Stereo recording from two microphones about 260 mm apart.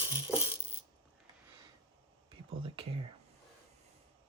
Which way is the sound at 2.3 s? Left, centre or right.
Centre.